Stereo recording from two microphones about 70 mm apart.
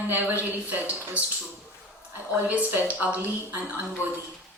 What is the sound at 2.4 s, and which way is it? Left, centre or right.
Speech, right.